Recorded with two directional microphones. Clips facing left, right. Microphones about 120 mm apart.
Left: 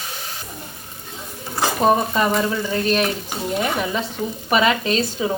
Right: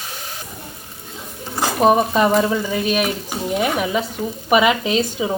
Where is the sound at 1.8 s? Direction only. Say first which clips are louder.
Right 3 dB; 20° right (ahead or behind).